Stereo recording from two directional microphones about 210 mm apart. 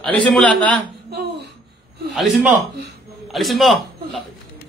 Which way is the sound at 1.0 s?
50° right (ahead or behind).